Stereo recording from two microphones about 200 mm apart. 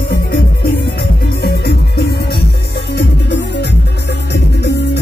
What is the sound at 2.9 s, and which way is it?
Music, 60° left (ahead or behind).